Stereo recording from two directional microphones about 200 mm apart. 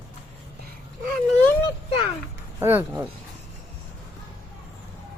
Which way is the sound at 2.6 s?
10° right (ahead or behind).